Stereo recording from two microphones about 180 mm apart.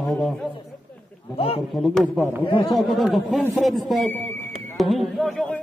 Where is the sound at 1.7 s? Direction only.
Centre (ahead or behind).